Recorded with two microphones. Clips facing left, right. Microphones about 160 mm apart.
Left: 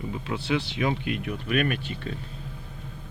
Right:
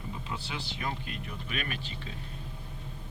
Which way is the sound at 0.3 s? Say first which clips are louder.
Left 15 dB; 70° left (ahead or behind).